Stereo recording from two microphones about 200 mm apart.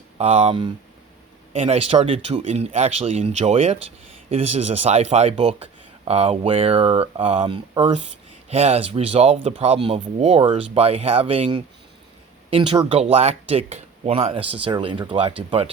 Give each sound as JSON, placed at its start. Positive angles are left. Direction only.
{"t": 0.2, "sound": "speech", "side_deg": -30}